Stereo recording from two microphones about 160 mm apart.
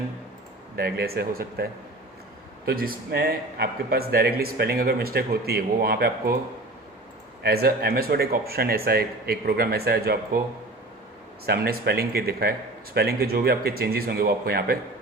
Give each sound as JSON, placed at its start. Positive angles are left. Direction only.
{"t": 0.8, "sound": "a man's voice", "side_deg": -75}
{"t": 7.4, "sound": "a man's voice", "side_deg": -75}
{"t": 11.4, "sound": "a man's voice", "side_deg": -70}